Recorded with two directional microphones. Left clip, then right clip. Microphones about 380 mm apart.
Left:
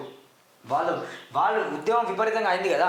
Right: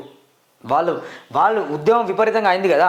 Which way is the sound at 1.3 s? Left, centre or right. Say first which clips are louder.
Right 7 dB; right.